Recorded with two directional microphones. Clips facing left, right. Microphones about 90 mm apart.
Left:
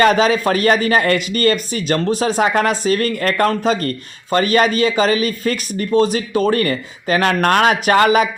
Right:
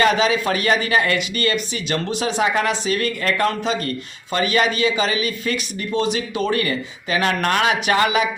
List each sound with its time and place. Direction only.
0.0 s speech: 40° left (ahead or behind)